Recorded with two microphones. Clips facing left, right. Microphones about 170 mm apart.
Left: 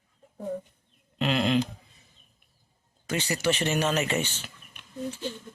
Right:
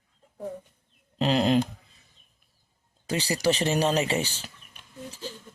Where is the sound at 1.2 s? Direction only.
40° right (ahead or behind).